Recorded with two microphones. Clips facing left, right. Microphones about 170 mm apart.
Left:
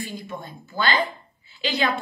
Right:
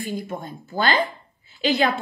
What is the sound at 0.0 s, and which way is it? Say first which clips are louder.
Speech: right 4 dB; 50° right (ahead or behind).